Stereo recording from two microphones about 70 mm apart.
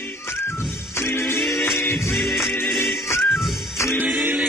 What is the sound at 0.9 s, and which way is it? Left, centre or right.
Music, left.